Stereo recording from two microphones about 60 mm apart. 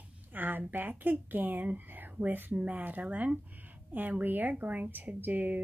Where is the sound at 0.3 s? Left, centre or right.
Right.